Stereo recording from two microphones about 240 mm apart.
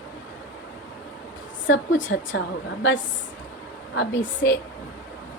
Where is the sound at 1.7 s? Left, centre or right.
Left.